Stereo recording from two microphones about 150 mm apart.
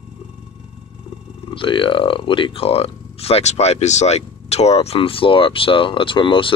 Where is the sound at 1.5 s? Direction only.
35° left (ahead or behind).